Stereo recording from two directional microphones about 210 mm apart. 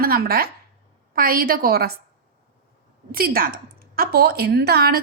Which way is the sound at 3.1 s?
45° right (ahead or behind).